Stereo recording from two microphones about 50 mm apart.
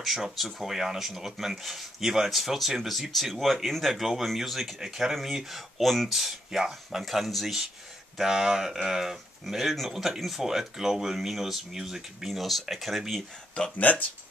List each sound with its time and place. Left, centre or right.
0.0 s speech: centre
13.7 s speech: left